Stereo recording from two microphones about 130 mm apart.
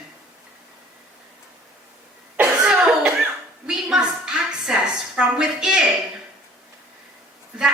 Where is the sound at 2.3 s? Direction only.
5° right (ahead or behind).